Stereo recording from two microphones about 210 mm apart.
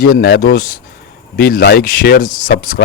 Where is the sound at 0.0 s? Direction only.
45° left (ahead or behind).